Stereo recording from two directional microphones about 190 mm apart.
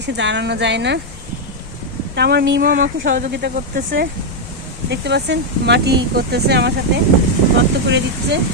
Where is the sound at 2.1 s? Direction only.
60° right (ahead or behind).